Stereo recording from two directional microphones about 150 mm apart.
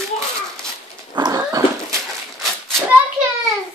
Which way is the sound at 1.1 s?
25° right (ahead or behind).